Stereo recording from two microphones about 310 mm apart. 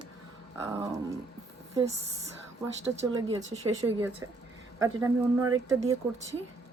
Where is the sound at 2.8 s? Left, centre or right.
Centre.